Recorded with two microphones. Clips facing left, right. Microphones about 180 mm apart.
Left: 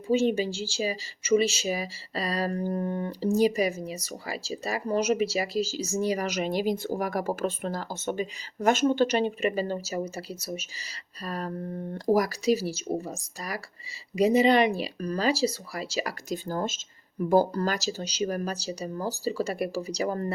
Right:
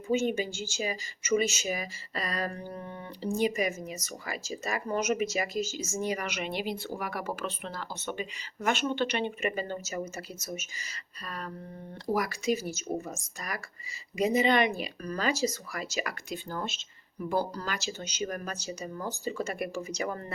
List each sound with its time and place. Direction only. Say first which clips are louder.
0.1 s speech: left 4 dB; 30° left (ahead or behind); by 17.7 s 50° left (ahead or behind)
17.7 s speech: left 5 dB; 35° left (ahead or behind)